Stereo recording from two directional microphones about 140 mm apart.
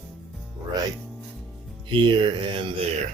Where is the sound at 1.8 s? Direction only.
35° right (ahead or behind).